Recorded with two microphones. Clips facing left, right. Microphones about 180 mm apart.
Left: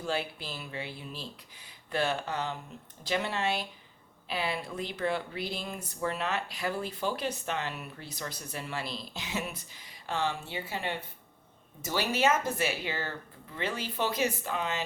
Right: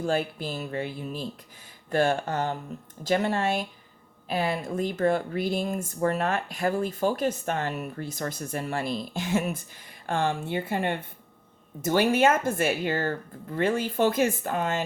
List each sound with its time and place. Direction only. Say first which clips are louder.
0.0 s speech: right 7 dB; 45° right (ahead or behind)